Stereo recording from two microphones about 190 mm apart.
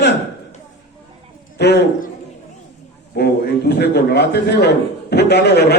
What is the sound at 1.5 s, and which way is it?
Speech, 60° left (ahead or behind).